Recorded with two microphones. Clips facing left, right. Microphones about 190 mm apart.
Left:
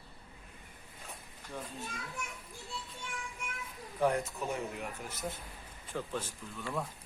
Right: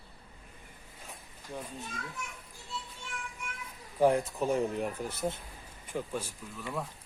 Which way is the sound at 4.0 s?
30° right (ahead or behind).